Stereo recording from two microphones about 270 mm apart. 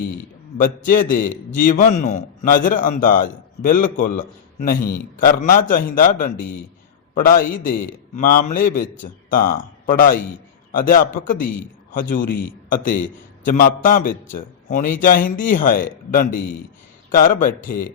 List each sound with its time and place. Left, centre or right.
0.6 s a man's voice: left